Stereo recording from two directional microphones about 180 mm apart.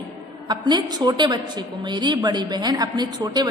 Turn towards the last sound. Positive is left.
turn(degrees=-25)  # may be behind; listen again after turning